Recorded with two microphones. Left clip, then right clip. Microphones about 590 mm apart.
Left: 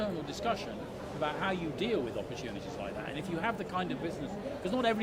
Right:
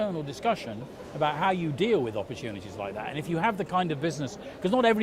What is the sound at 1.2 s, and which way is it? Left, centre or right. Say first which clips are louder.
Speech: right 8 dB; right.